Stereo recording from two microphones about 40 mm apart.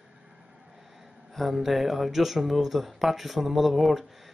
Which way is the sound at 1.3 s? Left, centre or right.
Centre.